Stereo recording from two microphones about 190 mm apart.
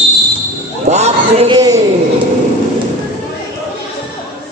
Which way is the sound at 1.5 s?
20° right (ahead or behind).